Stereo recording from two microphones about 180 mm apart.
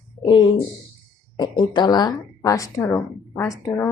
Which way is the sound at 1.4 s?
25° left (ahead or behind).